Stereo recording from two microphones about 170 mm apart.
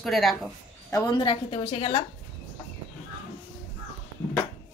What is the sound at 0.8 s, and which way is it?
A woman's voice, 20° left (ahead or behind).